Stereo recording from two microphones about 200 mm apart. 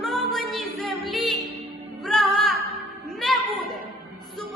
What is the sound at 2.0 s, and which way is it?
Music, centre (ahead or behind).